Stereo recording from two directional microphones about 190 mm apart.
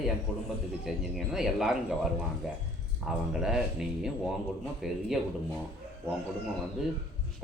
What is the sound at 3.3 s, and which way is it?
Speech, centre (ahead or behind).